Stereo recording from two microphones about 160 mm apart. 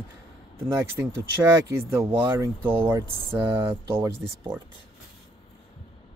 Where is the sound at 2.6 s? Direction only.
35° right (ahead or behind).